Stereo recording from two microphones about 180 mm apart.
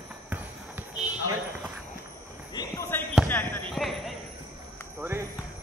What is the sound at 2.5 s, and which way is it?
Basketball bounce, 20° left (ahead or behind).